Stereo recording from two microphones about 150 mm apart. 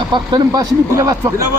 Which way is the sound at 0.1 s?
30° right (ahead or behind).